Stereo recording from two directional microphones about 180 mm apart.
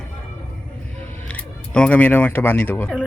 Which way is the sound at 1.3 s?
5° left (ahead or behind).